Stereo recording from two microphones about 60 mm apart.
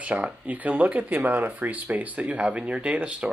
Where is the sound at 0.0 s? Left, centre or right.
Right.